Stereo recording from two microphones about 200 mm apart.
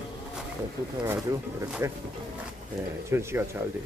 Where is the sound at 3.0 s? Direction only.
10° right (ahead or behind).